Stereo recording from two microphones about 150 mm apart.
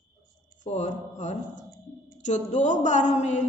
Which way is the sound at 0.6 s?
50° left (ahead or behind).